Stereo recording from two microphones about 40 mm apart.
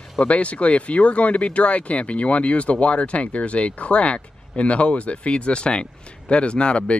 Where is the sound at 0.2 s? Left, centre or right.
Left.